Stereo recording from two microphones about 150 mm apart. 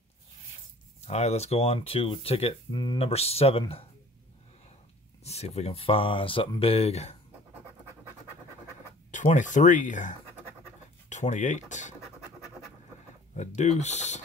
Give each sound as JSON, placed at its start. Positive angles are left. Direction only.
{"t": 1.0, "sound": "speech", "side_deg": 45}
{"t": 3.1, "sound": "speech", "side_deg": 40}
{"t": 5.2, "sound": "speech", "side_deg": 45}
{"t": 9.1, "sound": "speech", "side_deg": 55}
{"t": 13.4, "sound": "speech", "side_deg": 50}